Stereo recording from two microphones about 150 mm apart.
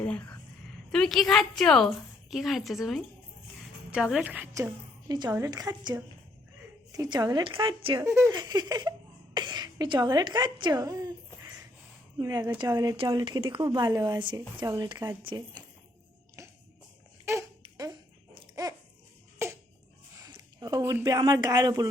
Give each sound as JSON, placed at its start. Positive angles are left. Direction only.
{"t": 0.9, "sound": "a woman's voice", "side_deg": 5}
{"t": 4.5, "sound": "a woman's voice", "side_deg": -25}
{"t": 8.0, "sound": "a woman's voice", "side_deg": -15}
{"t": 8.3, "sound": "a woman's voice", "side_deg": -30}
{"t": 9.3, "sound": "a sound", "side_deg": -30}
{"t": 12.1, "sound": "a woman's voice", "side_deg": -25}
{"t": 17.3, "sound": "a sound", "side_deg": -15}
{"t": 19.4, "sound": "a sound", "side_deg": -20}
{"t": 20.1, "sound": "speech", "side_deg": -25}